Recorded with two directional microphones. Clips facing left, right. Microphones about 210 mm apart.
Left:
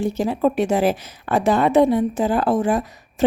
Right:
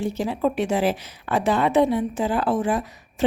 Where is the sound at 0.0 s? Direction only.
45° left (ahead or behind).